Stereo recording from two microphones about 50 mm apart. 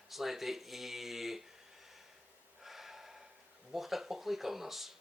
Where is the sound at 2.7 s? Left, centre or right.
Centre.